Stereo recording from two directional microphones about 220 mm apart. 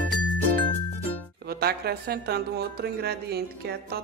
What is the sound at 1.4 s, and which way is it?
Speech, 45° right (ahead or behind).